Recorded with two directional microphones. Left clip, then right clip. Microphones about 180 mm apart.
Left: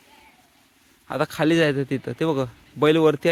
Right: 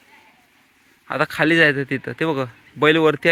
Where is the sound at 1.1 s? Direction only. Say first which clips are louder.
Right 3 dB; 10° left (ahead or behind).